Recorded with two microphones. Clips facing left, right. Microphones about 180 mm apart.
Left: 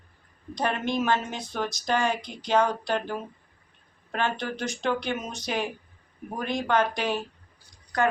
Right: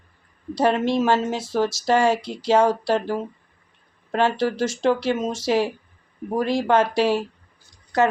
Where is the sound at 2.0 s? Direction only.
85° right.